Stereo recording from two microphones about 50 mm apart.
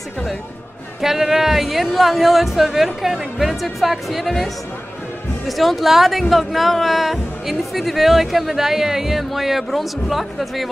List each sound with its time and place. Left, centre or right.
1.0 s speech: centre
5.5 s speech: centre